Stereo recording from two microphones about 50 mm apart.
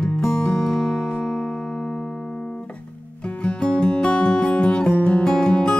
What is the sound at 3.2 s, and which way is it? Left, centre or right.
Music, left.